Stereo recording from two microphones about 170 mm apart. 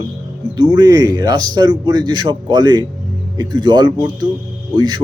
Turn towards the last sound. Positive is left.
turn(degrees=-25)  # may be behind; listen again after turning